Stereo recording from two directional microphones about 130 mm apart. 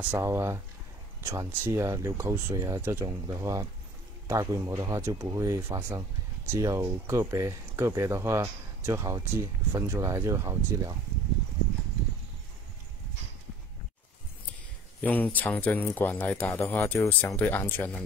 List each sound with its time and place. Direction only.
0.2 s speech: 20° right (ahead or behind)
15.0 s speech: 10° left (ahead or behind)